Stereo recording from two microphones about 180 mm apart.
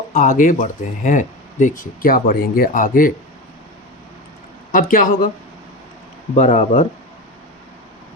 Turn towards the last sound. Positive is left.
turn(degrees=45)  # may be behind; listen again after turning